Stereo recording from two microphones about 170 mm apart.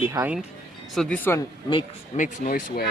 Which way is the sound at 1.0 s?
10° left (ahead or behind).